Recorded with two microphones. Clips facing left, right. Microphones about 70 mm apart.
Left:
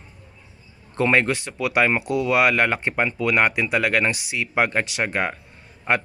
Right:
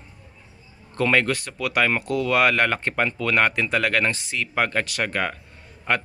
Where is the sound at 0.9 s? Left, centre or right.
Left.